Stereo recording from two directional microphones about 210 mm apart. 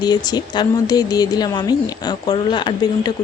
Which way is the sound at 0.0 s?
20° left (ahead or behind).